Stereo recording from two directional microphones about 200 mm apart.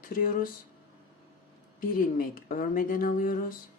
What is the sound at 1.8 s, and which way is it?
Speech, 45° left (ahead or behind).